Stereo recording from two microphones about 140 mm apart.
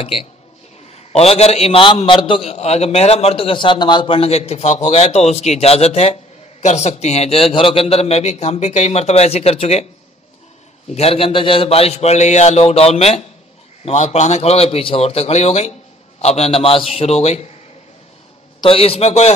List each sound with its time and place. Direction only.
0.0 s a man's voice: 40° left (ahead or behind)
11.0 s a man's voice: 45° left (ahead or behind)
18.6 s a man's voice: 45° left (ahead or behind)